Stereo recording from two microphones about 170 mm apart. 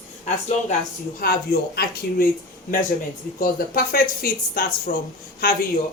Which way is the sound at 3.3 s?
55° left (ahead or behind).